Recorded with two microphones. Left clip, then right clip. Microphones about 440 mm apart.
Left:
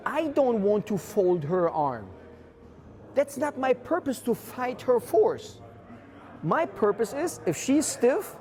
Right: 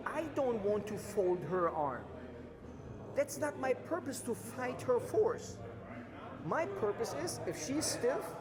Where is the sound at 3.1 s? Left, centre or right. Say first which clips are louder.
Left 9 dB; left.